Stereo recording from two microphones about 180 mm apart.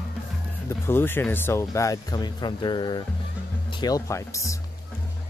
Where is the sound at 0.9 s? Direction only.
10° left (ahead or behind).